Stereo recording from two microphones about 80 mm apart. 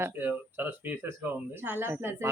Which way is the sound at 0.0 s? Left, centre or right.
Right.